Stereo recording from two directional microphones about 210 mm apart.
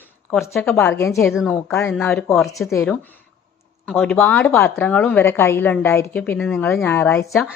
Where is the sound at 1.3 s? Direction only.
Centre (ahead or behind).